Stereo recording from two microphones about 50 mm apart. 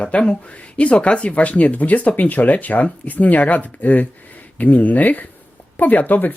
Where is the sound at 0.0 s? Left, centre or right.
Left.